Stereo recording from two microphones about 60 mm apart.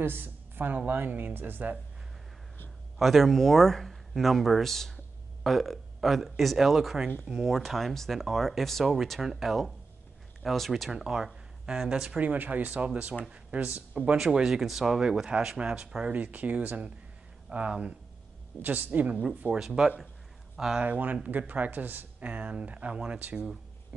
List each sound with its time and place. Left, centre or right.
0.0 s speech: right
3.0 s speech: centre
10.9 s speech: centre
12.2 s speech: right
14.1 s speech: centre
16.1 s speech: right
19.6 s speech: centre
20.8 s speech: right